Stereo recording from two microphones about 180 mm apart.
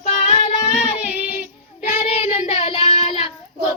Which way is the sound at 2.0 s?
35° left (ahead or behind).